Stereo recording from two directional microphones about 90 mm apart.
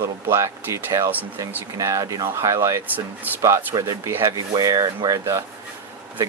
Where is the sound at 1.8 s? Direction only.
40° right (ahead or behind).